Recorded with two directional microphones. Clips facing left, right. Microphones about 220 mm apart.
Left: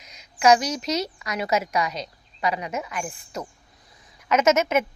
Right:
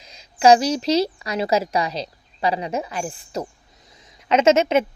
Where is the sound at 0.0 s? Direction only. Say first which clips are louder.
Right 4 dB; 30° right (ahead or behind).